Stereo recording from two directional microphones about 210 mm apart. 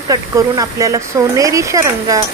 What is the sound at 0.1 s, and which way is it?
Speech, 15° right (ahead or behind).